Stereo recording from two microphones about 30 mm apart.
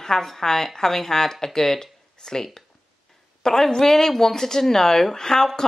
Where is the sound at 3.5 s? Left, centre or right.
Centre.